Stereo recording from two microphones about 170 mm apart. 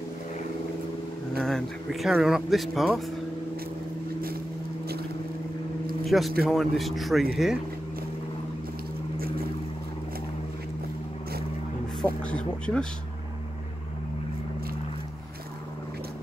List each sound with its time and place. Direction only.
1.4 s speech: centre (ahead or behind)
6.0 s speech: centre (ahead or behind)
12.0 s speech: 5° left (ahead or behind)